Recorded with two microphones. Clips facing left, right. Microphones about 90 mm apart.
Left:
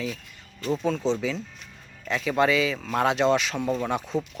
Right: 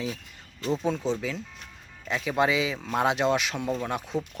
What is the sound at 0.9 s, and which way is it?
Speech, 10° right (ahead or behind).